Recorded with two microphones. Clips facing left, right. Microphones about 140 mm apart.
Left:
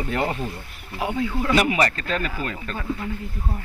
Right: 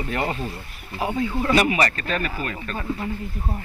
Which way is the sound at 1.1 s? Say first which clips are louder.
Right 1 dB; 15° right (ahead or behind).